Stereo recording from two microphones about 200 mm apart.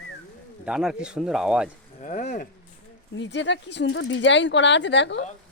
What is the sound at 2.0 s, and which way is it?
Speech, 40° left (ahead or behind).